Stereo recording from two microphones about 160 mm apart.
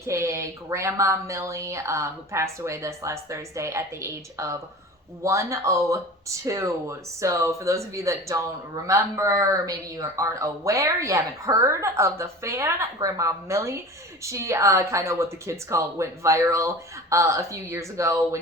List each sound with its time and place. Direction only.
0.0 s speech: 20° right (ahead or behind)